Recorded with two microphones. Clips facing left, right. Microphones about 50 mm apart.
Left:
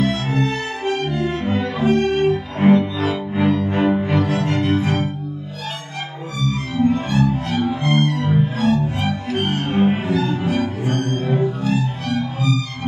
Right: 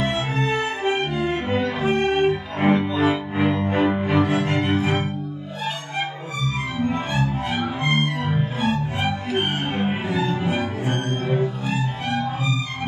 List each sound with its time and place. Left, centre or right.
0.0 s music: centre
3.7 s music: centre
6.4 s music: right